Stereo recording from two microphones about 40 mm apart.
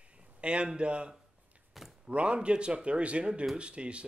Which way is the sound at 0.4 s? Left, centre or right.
Right.